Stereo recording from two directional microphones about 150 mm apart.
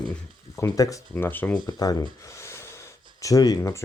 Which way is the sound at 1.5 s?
25° left (ahead or behind).